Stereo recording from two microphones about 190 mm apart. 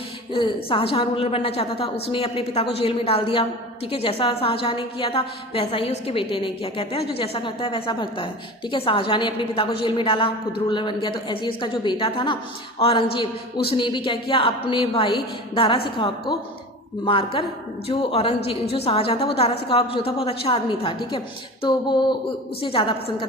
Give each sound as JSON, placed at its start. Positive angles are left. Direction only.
{"t": 0.3, "sound": "a woman's voice", "side_deg": 30}
{"t": 17.1, "sound": "a woman's voice", "side_deg": 30}